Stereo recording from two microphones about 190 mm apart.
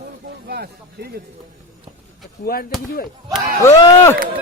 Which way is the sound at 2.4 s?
50° left (ahead or behind).